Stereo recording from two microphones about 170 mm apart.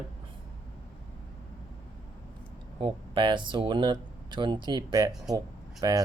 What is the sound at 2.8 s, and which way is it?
Speech, 30° right (ahead or behind).